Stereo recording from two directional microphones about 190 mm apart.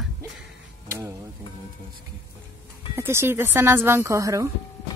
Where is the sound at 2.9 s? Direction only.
15° right (ahead or behind).